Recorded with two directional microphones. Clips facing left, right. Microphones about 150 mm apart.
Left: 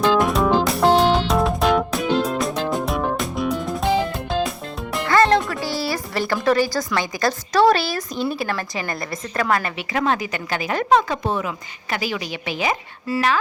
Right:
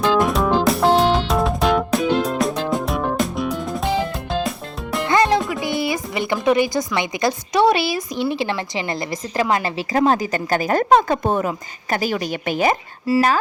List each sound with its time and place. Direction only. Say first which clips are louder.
0.0 s music: even; centre (ahead or behind)
5.0 s music: left 1 dB; 15° right (ahead or behind)
7.6 s speech: even; 5° right (ahead or behind)
8.1 s speech: right 1 dB; 70° right (ahead or behind)
8.4 s a woman's voice: right 2 dB; 25° right (ahead or behind)
9.7 s speech: right 4 dB; 35° right (ahead or behind)